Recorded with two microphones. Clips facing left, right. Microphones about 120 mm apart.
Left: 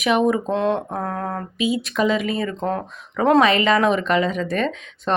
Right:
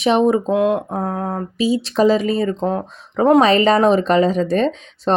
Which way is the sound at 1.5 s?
35° right (ahead or behind).